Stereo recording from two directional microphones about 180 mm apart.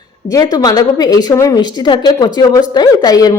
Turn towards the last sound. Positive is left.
turn(degrees=20)  # may be behind; listen again after turning